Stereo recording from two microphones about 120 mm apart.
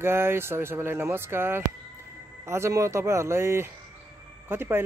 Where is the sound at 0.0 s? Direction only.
20° right (ahead or behind).